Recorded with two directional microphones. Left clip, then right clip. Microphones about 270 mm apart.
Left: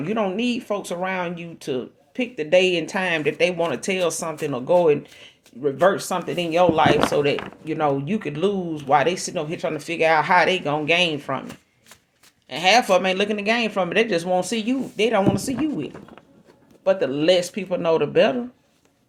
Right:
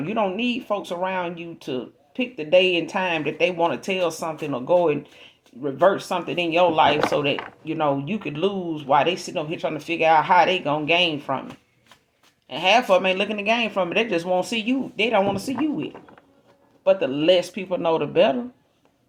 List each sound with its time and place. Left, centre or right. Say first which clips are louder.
0.0 s speech: even; left
8.4 s speech: even; left
12.5 s speech: left 1 dB; left